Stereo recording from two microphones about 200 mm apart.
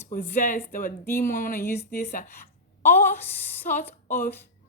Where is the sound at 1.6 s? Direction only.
10° left (ahead or behind).